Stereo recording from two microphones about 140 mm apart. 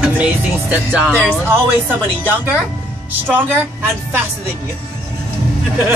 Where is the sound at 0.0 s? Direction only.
10° right (ahead or behind).